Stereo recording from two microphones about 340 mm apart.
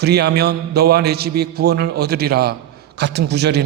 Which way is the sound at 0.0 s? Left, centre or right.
Right.